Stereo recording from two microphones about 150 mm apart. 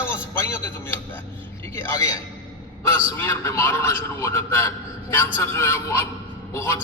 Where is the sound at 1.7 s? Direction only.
20° left (ahead or behind).